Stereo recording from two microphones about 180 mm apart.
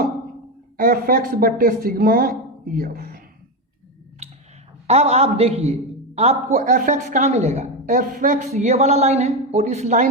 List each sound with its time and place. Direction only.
0.8 s speech: 50° right (ahead or behind)
4.9 s a man's voice: 35° right (ahead or behind)